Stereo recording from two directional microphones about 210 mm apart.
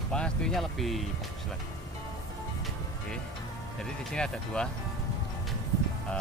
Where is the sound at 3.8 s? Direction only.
5° left (ahead or behind).